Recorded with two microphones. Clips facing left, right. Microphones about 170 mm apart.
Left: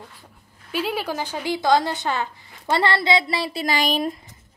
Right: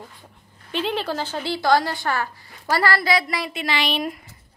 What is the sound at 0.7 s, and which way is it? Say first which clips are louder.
A woman's voice: right 1 dB; 5° left (ahead or behind).